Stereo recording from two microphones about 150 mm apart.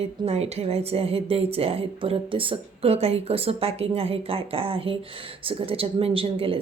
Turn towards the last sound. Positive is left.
turn(degrees=-35)  # may be behind; listen again after turning